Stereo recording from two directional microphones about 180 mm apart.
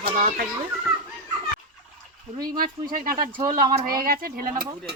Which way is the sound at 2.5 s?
50° right (ahead or behind).